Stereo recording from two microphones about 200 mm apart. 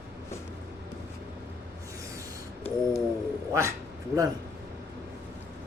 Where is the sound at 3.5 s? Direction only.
15° right (ahead or behind).